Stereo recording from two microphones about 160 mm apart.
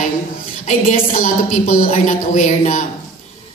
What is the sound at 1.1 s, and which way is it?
A woman's voice, 55° left (ahead or behind).